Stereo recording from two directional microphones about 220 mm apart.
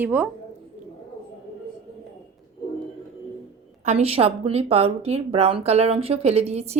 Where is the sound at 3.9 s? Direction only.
30° right (ahead or behind).